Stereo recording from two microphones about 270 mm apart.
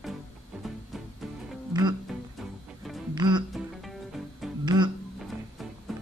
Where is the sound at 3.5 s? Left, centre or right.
Centre.